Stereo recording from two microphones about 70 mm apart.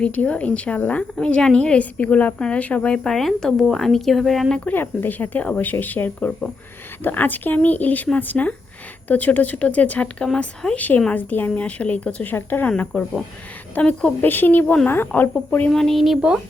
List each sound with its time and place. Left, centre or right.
0.0 s a woman's voice: centre
1.1 s a woman's voice: centre
4.6 s a woman's voice: left; by 10.8 s centre
10.8 s a woman's voice: left
15.7 s speech: centre